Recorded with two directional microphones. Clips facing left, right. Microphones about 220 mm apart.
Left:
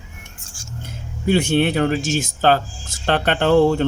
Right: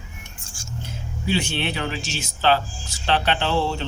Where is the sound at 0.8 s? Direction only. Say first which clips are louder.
Even; 50° left (ahead or behind).